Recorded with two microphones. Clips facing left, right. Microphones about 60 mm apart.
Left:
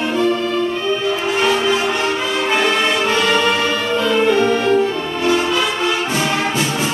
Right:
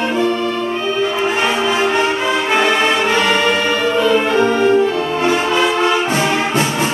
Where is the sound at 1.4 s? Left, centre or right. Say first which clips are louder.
Left 2 dB; right.